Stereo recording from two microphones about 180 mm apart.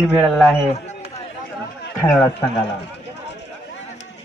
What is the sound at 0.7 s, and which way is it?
Chatter, 35° left (ahead or behind).